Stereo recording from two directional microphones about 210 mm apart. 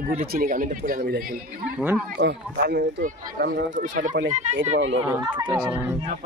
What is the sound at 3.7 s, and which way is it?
Speech, 35° right (ahead or behind).